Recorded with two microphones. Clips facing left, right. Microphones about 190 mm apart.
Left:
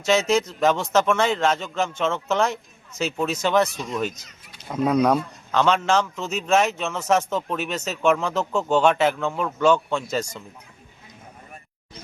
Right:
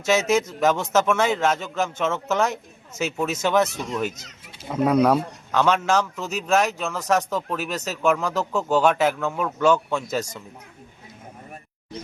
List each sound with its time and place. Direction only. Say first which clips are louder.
0.1 s speech: even; 5° right (ahead or behind)